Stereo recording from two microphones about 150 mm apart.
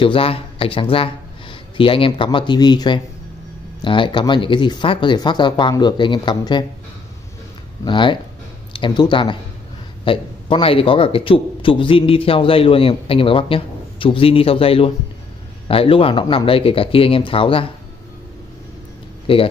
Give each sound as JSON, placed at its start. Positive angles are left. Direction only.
{"t": 0.0, "sound": "a man's voice", "side_deg": 35}
{"t": 7.8, "sound": "a man's voice", "side_deg": 30}
{"t": 19.3, "sound": "a man's voice", "side_deg": 35}